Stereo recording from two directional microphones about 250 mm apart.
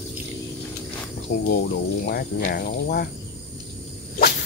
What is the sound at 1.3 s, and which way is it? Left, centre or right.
Speech, left.